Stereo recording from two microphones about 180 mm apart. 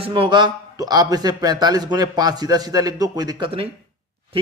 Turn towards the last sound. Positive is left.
turn(degrees=-30)  # may be behind; listen again after turning